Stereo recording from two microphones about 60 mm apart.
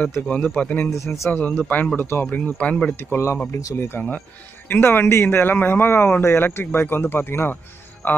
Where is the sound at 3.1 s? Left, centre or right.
Left.